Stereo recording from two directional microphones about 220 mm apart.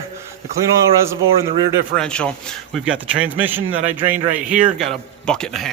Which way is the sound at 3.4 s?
10° right (ahead or behind).